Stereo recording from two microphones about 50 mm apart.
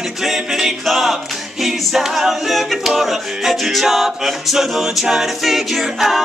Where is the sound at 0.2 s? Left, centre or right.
Centre.